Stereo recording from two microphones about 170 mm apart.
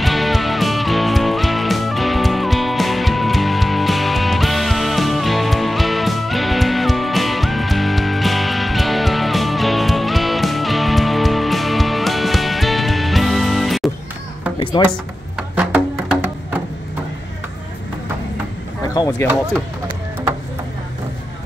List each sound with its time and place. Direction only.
0.0 s music: centre (ahead or behind)
14.8 s speech: 25° left (ahead or behind)
15.3 s music: 5° right (ahead or behind)
19.0 s a sound: 25° left (ahead or behind)